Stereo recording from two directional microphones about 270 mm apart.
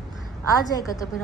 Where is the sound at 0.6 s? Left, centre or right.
Centre.